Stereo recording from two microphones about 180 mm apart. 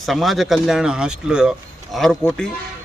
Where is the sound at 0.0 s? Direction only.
Centre (ahead or behind).